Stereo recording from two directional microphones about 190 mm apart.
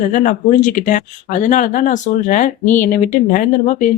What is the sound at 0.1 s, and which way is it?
Speech, 45° left (ahead or behind).